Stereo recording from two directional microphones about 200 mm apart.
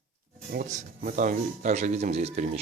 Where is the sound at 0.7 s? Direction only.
40° right (ahead or behind).